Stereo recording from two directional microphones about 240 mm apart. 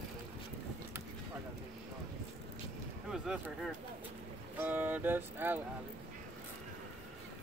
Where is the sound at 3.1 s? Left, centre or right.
Centre.